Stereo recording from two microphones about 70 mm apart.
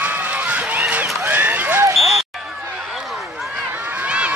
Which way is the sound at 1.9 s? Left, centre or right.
Centre.